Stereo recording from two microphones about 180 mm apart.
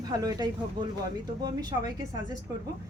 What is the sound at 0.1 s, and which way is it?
A woman's voice, 20° right (ahead or behind).